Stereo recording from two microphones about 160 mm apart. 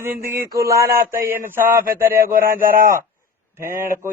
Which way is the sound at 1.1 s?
15° right (ahead or behind).